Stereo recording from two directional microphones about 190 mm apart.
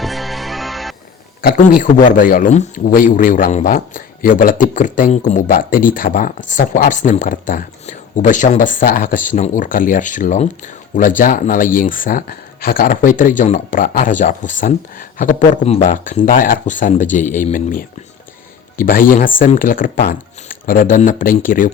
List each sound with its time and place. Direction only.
0.0 s music: centre (ahead or behind)
1.4 s a man's voice: 50° left (ahead or behind)